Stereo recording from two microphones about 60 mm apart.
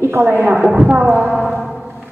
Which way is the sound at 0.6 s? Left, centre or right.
Centre.